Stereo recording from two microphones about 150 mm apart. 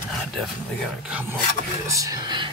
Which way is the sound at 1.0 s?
10° right (ahead or behind).